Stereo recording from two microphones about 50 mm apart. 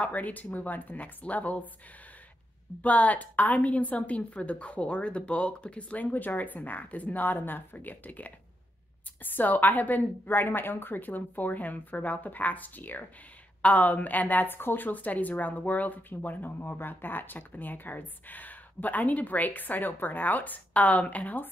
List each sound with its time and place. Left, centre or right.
0.0 s a woman's voice: left
2.8 s a woman's voice: left